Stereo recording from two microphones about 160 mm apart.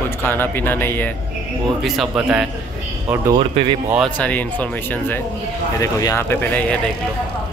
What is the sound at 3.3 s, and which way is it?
Speech, 30° right (ahead or behind).